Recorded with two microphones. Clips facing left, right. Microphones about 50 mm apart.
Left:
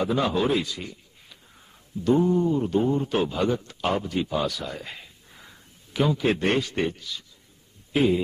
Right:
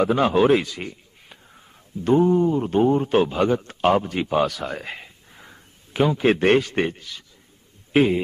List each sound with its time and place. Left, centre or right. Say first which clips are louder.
0.0 s a man's voice: right 6 dB; right